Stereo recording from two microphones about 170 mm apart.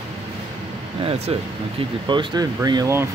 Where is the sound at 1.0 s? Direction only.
35° right (ahead or behind).